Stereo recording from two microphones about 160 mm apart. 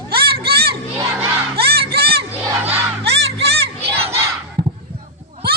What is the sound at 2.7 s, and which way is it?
Crowd, 15° right (ahead or behind).